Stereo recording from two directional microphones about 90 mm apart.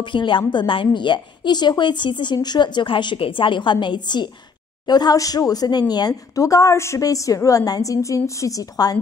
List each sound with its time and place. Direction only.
0.0 s a woman's voice: 65° left (ahead or behind); by 8.9 s 45° left (ahead or behind)